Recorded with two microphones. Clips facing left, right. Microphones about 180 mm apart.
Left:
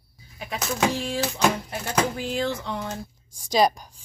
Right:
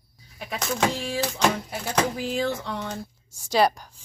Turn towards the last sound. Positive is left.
turn(degrees=15)  # may be behind; listen again after turning